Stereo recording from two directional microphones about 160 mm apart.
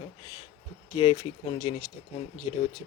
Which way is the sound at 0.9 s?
35° left (ahead or behind).